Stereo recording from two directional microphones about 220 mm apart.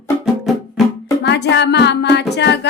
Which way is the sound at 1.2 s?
50° left (ahead or behind).